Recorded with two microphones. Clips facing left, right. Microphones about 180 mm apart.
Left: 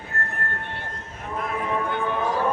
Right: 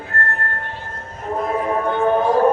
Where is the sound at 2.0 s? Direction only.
50° right (ahead or behind).